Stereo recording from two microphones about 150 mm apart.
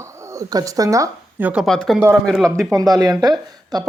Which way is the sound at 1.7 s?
5° left (ahead or behind).